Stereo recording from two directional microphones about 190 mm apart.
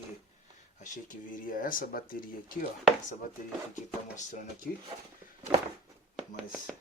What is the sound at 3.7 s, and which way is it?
Speech, 40° left (ahead or behind).